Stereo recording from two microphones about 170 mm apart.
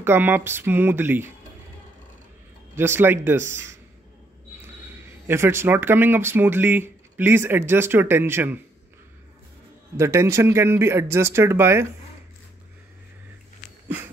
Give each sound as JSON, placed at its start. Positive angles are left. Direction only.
{"t": 0.0, "sound": "speech", "side_deg": -15}
{"t": 2.7, "sound": "speech", "side_deg": -15}
{"t": 5.2, "sound": "speech", "side_deg": -15}
{"t": 9.9, "sound": "speech", "side_deg": -15}